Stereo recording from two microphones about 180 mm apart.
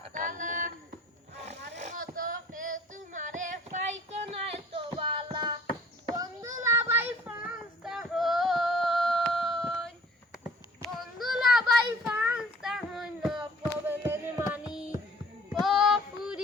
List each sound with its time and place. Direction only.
0.0 s a sound: 45° right (ahead or behind)
1.8 s female singing: 45° right (ahead or behind); by 5.5 s 25° right (ahead or behind)
6.1 s child singing: 20° right (ahead or behind); by 9.9 s 5° left (ahead or behind)
10.8 s a sound: centre (ahead or behind)
12.0 s child singing: 5° right (ahead or behind)
13.8 s music: 10° right (ahead or behind)
15.5 s female singing: centre (ahead or behind)